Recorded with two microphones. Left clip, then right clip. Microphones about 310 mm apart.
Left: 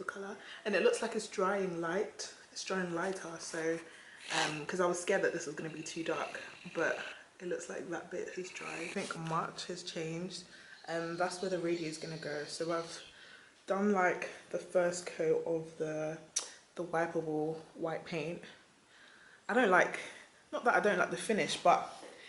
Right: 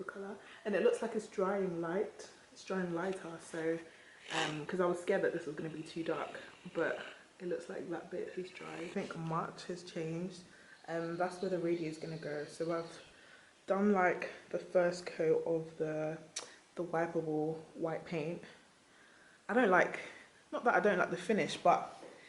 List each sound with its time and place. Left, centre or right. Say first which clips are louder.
0.0 s speech: left 3 dB; centre
17.8 s speech: left 1 dB; centre
19.5 s a sound: left 1 dB; centre
20.7 s speech: left 1 dB; centre